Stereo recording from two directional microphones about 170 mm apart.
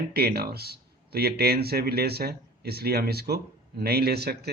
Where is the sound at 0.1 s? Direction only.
65° right (ahead or behind).